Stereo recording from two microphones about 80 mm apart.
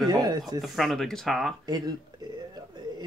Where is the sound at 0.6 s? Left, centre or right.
Centre.